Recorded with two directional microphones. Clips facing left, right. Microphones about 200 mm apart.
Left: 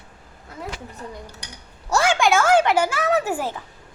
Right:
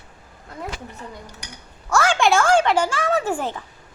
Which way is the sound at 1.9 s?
15° left (ahead or behind).